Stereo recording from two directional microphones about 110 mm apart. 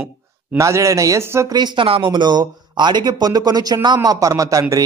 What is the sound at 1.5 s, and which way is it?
Speech, 40° right (ahead or behind).